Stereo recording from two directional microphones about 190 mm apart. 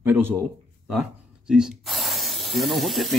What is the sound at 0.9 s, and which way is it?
Spray, centre (ahead or behind).